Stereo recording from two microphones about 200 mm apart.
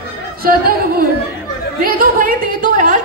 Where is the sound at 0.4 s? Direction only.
50° right (ahead or behind).